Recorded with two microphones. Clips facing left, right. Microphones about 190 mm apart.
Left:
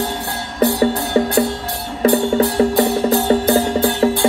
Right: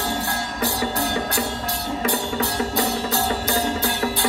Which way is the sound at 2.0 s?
55° left (ahead or behind).